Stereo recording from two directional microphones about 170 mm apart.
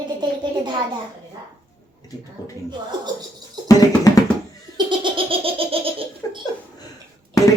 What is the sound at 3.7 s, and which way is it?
Music, 20° left (ahead or behind).